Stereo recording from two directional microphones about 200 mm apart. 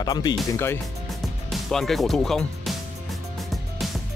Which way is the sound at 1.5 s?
Centre (ahead or behind).